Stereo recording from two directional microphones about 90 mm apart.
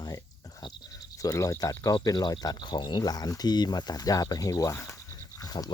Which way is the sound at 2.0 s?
50° left (ahead or behind).